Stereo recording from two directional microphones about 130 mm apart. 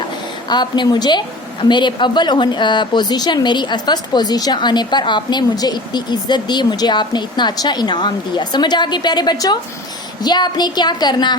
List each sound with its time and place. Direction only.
0.4 s a woman's voice: 35° left (ahead or behind)